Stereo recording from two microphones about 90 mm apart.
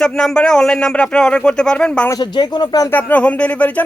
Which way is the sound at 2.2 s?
50° left (ahead or behind).